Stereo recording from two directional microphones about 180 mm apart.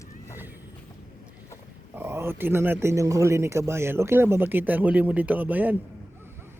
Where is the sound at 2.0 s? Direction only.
15° right (ahead or behind).